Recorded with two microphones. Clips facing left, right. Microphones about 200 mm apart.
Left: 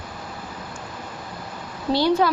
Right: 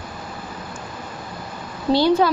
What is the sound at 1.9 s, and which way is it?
Speech, 25° right (ahead or behind).